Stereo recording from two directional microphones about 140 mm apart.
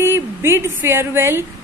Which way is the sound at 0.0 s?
20° right (ahead or behind).